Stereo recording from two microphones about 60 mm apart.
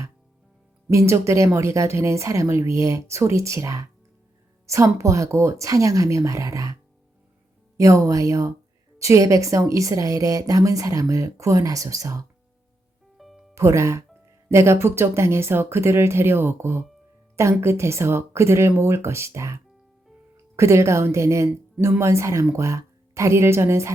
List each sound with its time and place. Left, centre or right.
0.9 s speech: right
7.8 s a woman's voice: right
13.1 s music: centre
13.5 s speech: right